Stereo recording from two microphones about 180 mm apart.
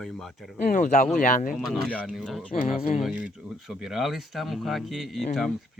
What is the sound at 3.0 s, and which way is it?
Speech, 5° right (ahead or behind).